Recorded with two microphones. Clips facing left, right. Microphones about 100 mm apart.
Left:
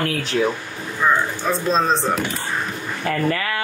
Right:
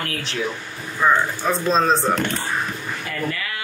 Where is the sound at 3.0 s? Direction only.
40° left (ahead or behind).